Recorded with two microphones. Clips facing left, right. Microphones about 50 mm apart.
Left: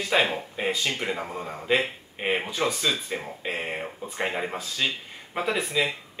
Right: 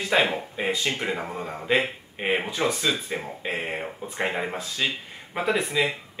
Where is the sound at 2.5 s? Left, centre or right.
Centre.